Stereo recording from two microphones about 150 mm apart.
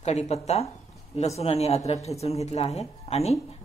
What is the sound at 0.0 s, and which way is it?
Speech, 45° left (ahead or behind).